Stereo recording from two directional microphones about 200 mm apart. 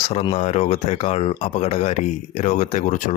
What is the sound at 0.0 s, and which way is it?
Speech, 30° left (ahead or behind).